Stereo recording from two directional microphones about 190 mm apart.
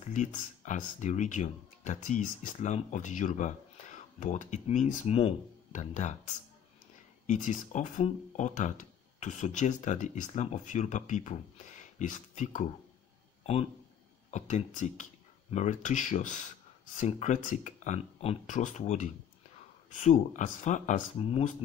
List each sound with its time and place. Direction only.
0.0 s speech: 40° left (ahead or behind)
7.2 s speech: 40° left (ahead or behind)
13.4 s a sound: 35° left (ahead or behind)
14.3 s speech: 40° left (ahead or behind)